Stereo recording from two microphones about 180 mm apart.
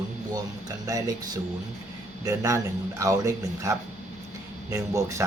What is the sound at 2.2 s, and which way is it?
Speech, 20° right (ahead or behind).